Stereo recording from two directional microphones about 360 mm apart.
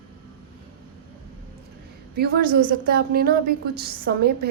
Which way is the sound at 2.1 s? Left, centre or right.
Right.